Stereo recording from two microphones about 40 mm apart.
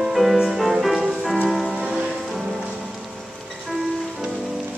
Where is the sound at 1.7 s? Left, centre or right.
Right.